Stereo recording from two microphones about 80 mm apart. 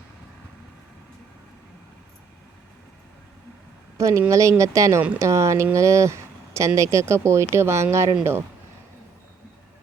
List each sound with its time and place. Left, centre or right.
3.9 s a woman's voice: right